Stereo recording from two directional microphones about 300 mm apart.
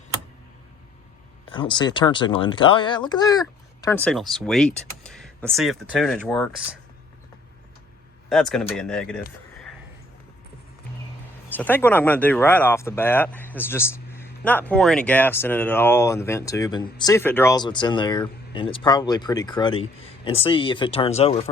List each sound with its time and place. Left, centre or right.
1.5 s speech: centre
8.3 s speech: centre
11.5 s speech: centre